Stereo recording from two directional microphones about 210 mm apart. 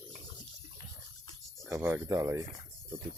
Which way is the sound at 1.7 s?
15° right (ahead or behind).